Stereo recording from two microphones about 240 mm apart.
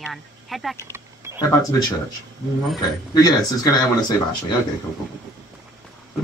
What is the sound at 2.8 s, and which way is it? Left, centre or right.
Speech, centre.